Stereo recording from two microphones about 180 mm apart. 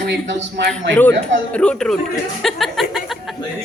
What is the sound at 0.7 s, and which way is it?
A man's voice, 10° left (ahead or behind).